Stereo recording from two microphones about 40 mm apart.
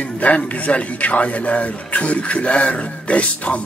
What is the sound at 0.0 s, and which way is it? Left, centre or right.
A man's voice, left.